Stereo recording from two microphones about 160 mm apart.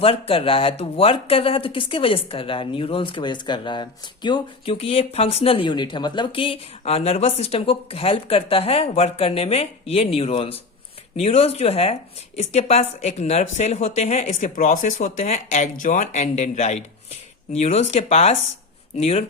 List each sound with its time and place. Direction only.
0.0 s speech: 35° left (ahead or behind)